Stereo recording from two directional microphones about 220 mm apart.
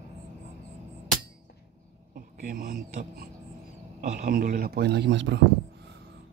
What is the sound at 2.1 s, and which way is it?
A man's voice, 40° right (ahead or behind).